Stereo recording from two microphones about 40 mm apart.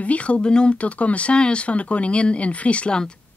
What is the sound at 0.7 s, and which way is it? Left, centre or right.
Speech, left.